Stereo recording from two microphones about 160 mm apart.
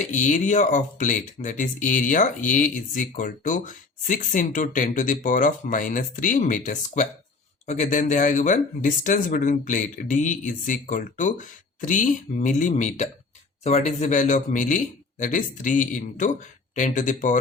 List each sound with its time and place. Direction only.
0.0 s speech: 50° left (ahead or behind)